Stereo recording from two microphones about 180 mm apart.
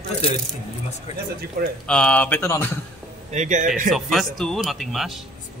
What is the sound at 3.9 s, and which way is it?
Speech, centre (ahead or behind).